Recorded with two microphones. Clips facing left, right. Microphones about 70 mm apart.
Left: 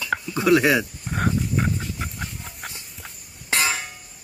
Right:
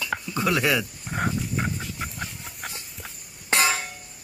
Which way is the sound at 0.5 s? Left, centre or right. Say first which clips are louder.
Left 7 dB; left.